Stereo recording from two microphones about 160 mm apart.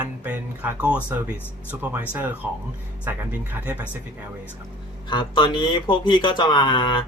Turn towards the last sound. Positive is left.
turn(degrees=30)  # may be behind; listen again after turning